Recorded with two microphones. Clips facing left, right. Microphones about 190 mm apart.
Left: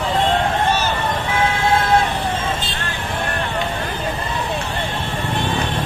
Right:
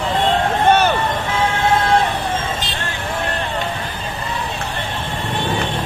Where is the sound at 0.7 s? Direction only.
60° right (ahead or behind).